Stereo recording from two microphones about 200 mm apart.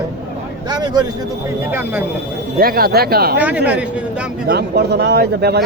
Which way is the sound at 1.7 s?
10° right (ahead or behind).